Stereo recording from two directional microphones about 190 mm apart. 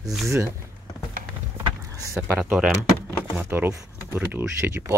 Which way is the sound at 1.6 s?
20° right (ahead or behind).